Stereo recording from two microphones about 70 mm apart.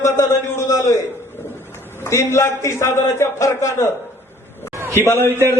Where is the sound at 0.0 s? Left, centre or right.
Left.